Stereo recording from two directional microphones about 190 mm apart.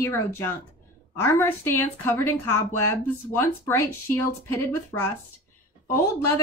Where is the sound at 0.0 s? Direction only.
15° left (ahead or behind).